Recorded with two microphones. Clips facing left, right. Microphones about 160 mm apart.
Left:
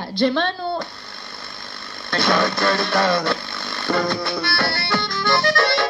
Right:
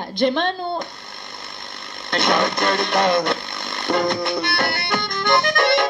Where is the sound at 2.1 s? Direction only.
20° right (ahead or behind).